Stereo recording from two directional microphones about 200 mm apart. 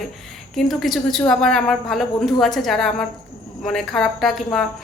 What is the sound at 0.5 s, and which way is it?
A woman's voice, centre (ahead or behind).